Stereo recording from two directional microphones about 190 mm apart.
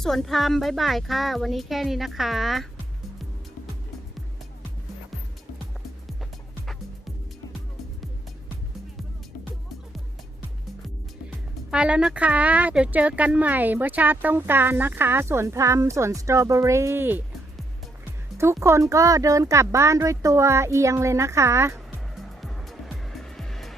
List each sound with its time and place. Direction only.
0.0 s speech: centre (ahead or behind)
11.7 s speech: 5° right (ahead or behind)
18.6 s speech: 15° right (ahead or behind)
21.8 s music: centre (ahead or behind)